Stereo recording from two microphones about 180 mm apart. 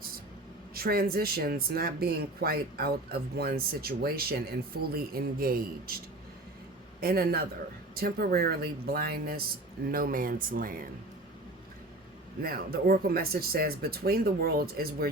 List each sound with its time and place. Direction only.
0.7 s speech: 55° right (ahead or behind)
7.0 s speech: 60° right (ahead or behind)
12.4 s speech: 55° right (ahead or behind)